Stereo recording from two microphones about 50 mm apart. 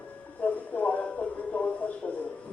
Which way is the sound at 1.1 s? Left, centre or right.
Left.